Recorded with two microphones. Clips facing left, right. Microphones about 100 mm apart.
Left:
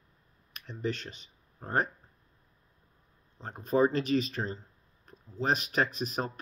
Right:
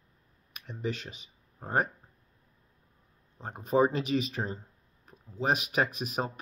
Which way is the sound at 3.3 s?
15° right (ahead or behind).